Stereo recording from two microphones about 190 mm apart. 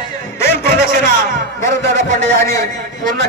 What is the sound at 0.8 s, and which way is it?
Music, 45° right (ahead or behind).